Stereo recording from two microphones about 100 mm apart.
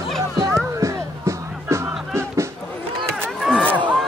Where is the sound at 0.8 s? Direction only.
30° right (ahead or behind).